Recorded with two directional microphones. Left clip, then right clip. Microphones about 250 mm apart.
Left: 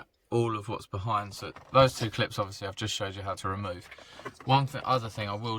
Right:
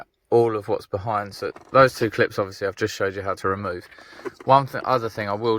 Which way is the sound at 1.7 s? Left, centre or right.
Centre.